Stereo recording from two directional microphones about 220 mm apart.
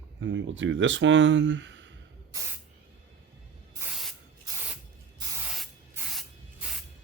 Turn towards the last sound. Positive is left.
turn(degrees=0)  # may be behind; listen again after turning